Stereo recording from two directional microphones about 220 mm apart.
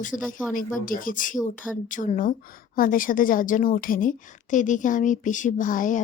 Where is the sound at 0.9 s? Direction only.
40° left (ahead or behind).